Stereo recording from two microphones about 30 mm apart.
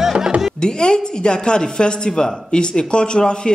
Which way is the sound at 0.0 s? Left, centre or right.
Centre.